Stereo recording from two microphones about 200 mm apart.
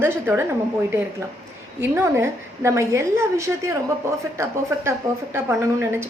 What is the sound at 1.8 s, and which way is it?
A woman's voice, 10° right (ahead or behind).